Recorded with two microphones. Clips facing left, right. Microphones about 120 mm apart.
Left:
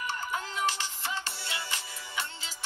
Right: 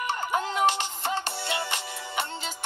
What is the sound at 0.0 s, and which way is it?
Music, 70° right (ahead or behind).